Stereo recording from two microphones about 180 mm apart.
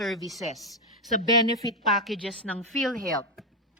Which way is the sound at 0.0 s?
Centre (ahead or behind).